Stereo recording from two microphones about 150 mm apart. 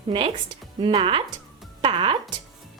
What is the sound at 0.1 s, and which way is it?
A woman's voice, 40° right (ahead or behind).